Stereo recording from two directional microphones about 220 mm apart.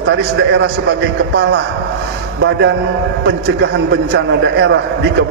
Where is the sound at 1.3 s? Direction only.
50° right (ahead or behind).